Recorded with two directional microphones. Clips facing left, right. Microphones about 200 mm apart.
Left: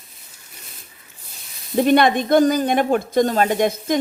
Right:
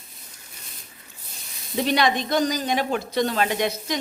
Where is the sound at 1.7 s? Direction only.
50° left (ahead or behind).